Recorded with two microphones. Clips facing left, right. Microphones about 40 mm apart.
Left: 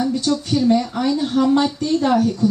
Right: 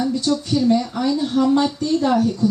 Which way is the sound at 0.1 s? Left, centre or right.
Left.